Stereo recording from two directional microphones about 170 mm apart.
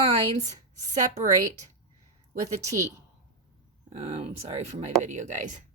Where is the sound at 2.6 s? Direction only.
20° right (ahead or behind).